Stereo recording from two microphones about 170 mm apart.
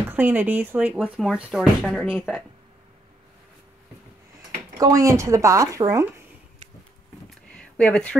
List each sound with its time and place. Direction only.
0.1 s speech: 10° right (ahead or behind)
4.7 s speech: 20° right (ahead or behind)
7.2 s a sound: 5° left (ahead or behind)